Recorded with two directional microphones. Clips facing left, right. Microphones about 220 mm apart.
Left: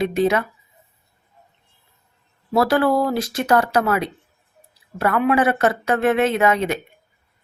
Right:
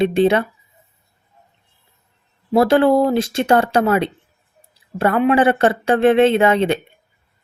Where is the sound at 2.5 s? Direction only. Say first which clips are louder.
Right 4 dB; 25° right (ahead or behind).